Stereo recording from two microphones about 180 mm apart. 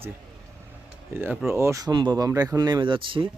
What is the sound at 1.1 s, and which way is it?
A man's voice, 15° right (ahead or behind).